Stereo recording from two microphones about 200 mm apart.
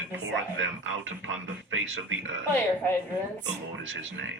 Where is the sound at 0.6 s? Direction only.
70° right (ahead or behind).